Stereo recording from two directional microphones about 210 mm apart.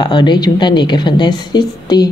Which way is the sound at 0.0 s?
20° left (ahead or behind).